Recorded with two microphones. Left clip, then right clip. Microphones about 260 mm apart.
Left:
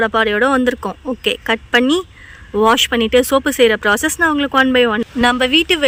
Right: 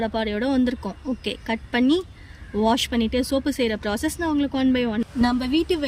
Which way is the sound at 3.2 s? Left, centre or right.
Centre.